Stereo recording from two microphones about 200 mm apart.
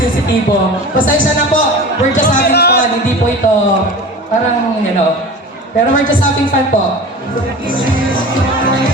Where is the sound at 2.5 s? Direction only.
55° left (ahead or behind).